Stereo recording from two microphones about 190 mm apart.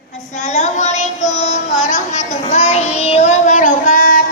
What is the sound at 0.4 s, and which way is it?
Child singing, 40° left (ahead or behind).